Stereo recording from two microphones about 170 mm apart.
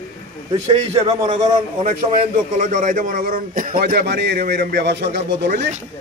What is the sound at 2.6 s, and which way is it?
A man's voice, 50° right (ahead or behind).